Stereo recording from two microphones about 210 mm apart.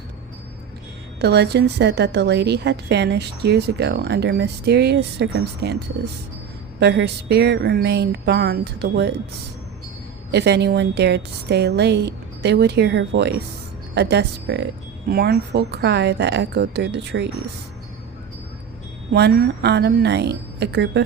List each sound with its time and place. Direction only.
1.2 s a woman's voice: 50° right (ahead or behind)
6.7 s a woman's voice: 55° right (ahead or behind)
10.3 s a woman's voice: 55° right (ahead or behind)
19.1 s a woman's voice: 50° right (ahead or behind)